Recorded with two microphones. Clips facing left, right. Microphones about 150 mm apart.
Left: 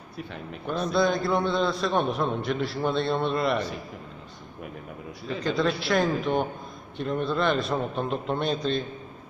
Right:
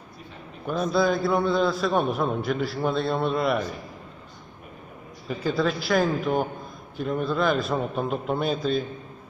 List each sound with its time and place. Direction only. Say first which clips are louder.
0.7 s a man's voice: right 1 dB; 5° right (ahead or behind)
5.3 s a man's voice: right 1 dB; 5° right (ahead or behind)